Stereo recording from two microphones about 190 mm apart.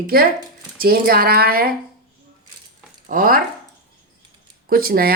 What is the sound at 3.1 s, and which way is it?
Speech, 45° right (ahead or behind).